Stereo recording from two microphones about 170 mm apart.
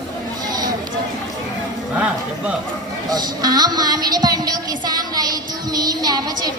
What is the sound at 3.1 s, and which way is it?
Speech, 25° right (ahead or behind).